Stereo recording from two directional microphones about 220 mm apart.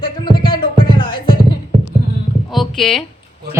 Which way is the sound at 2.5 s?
Centre (ahead or behind).